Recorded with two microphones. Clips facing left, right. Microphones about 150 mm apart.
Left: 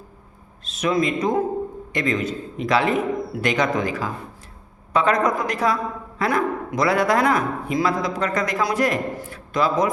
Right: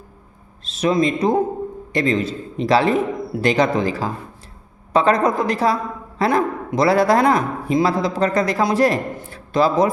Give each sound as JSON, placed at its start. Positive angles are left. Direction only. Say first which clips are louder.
{"t": 0.6, "sound": "a man's voice", "louder": "right 3 dB", "side_deg": -30}